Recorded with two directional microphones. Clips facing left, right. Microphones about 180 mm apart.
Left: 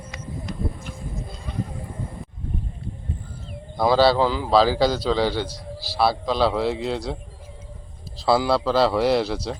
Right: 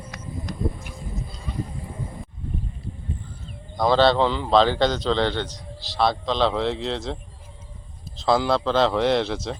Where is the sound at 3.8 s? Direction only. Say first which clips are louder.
Left 1 dB; 5° left (ahead or behind).